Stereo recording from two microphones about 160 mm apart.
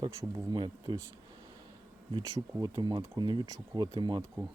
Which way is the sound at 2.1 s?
25° right (ahead or behind).